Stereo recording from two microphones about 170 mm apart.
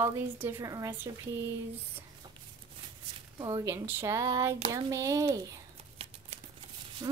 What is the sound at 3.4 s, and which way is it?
Speech, 20° right (ahead or behind).